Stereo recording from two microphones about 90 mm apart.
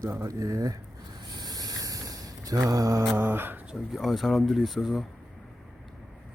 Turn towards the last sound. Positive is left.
turn(degrees=0)  # may be behind; listen again after turning